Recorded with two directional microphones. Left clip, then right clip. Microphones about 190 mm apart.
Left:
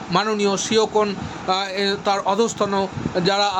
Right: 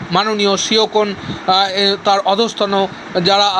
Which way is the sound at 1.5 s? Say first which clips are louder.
Right 8 dB; 5° right (ahead or behind).